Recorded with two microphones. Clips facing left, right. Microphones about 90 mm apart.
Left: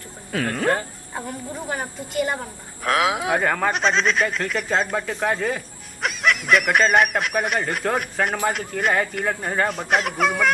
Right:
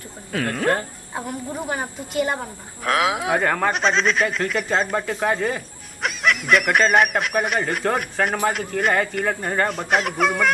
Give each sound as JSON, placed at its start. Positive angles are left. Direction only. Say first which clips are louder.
{"t": 0.3, "sound": "speech", "louder": "even", "side_deg": 0}
{"t": 1.7, "sound": "a woman's voice", "louder": "right 1 dB", "side_deg": -15}
{"t": 2.8, "sound": "speech", "louder": "even", "side_deg": 0}